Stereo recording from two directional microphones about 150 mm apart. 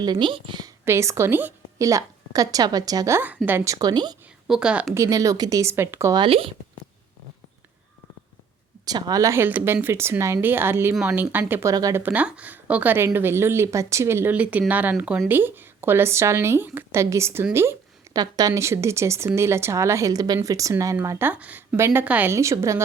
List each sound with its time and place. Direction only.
0.0 s a woman's voice: 30° right (ahead or behind)
0.9 s speech: 20° right (ahead or behind)
4.4 s speech: 5° right (ahead or behind)
4.9 s speech: 20° right (ahead or behind)
6.1 s a woman's voice: 35° right (ahead or behind)
8.8 s speech: 25° right (ahead or behind)